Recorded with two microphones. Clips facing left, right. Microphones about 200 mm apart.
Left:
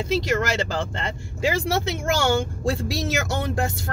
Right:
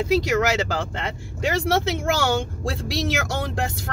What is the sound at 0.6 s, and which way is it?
Speech, 5° right (ahead or behind).